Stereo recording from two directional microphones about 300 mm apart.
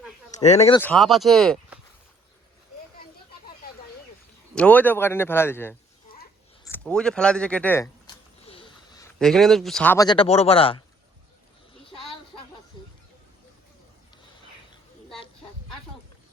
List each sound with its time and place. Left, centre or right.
0.3 s speech: left
0.8 s speech: centre
4.5 s speech: centre
11.9 s a sound: centre